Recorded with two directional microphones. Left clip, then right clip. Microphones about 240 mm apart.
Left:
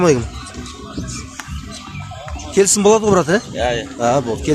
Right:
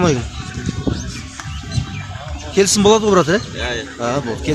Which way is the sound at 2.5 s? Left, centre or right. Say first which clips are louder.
Even; centre.